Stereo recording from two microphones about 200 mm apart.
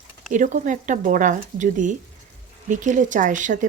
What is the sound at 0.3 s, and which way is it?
A woman's voice, 40° right (ahead or behind).